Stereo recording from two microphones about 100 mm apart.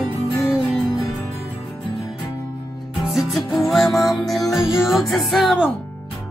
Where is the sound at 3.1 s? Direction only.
Centre (ahead or behind).